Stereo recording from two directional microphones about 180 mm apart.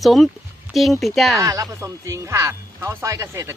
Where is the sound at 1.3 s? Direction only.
20° right (ahead or behind).